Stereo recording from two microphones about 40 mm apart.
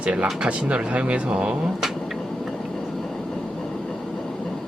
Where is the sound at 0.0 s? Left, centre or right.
Right.